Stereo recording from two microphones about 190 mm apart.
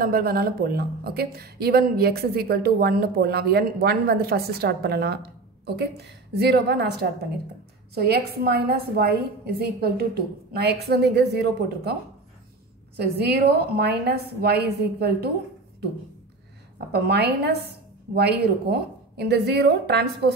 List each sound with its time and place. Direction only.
0.0 s a woman's voice: 50° right (ahead or behind)
16.7 s a woman's voice: 60° right (ahead or behind)